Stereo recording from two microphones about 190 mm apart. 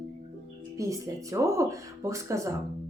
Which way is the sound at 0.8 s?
15° right (ahead or behind).